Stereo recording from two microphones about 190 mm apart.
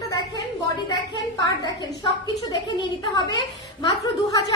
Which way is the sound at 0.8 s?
20° left (ahead or behind).